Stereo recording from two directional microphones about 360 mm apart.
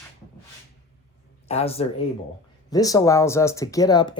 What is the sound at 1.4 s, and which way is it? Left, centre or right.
Speech, centre.